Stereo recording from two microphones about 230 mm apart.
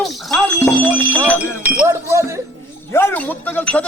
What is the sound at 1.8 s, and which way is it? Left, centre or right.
Speech, centre.